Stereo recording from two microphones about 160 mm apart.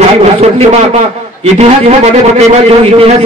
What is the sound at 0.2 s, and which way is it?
A man's voice, 45° right (ahead or behind).